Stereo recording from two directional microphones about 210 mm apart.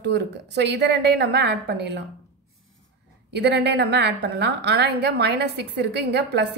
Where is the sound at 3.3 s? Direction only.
50° right (ahead or behind).